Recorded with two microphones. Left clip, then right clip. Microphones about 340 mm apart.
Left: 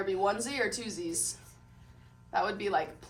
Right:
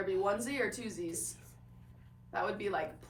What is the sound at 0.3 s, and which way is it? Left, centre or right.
A woman's voice, centre.